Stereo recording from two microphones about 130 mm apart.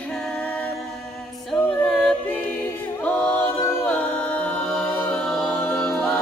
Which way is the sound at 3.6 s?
15° left (ahead or behind).